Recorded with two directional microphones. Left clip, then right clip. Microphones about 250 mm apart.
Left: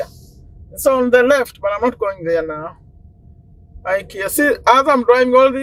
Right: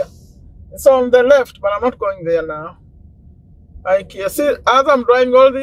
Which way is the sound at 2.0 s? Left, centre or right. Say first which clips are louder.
Right 1 dB; left.